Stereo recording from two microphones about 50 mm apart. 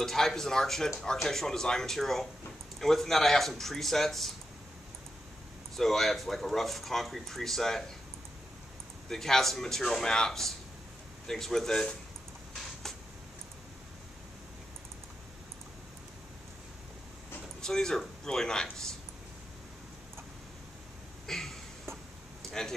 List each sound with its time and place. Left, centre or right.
0.0 s a man's voice: centre
5.8 s speech: centre
9.1 s a man's voice: centre
17.6 s a man's voice: centre
21.3 s a sound: centre
22.5 s speech: centre